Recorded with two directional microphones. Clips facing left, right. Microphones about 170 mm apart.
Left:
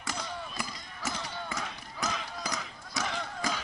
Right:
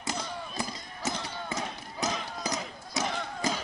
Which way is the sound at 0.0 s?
20° right (ahead or behind).